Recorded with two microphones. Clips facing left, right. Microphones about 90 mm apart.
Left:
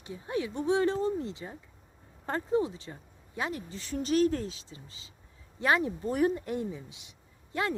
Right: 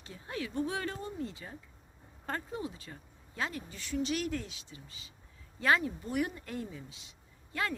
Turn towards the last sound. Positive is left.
turn(degrees=25)  # may be behind; listen again after turning